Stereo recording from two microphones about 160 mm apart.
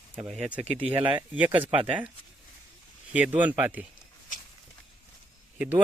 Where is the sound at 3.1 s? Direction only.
10° right (ahead or behind).